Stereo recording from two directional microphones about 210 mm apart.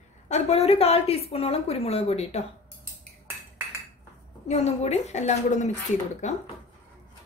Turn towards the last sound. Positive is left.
turn(degrees=35)  # may be behind; listen again after turning